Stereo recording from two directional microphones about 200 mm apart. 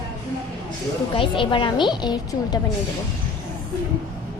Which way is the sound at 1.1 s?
25° left (ahead or behind).